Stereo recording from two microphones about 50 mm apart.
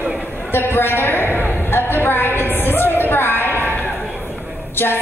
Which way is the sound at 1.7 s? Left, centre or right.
Left.